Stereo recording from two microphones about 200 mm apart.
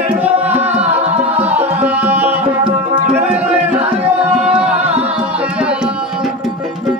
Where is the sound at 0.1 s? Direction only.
10° right (ahead or behind).